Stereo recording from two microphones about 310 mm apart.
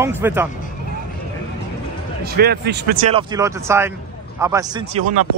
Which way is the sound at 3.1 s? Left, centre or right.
Centre.